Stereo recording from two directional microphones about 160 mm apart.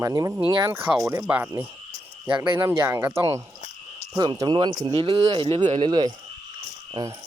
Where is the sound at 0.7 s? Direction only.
15° right (ahead or behind); by 6.1 s 30° right (ahead or behind).